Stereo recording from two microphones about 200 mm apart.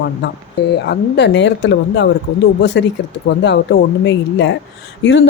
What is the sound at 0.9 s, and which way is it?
Speech, 60° left (ahead or behind).